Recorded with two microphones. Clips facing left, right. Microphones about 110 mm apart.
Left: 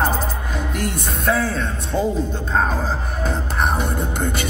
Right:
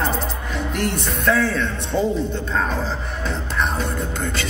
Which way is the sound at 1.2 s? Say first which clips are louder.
Right 1 dB; 45° left (ahead or behind).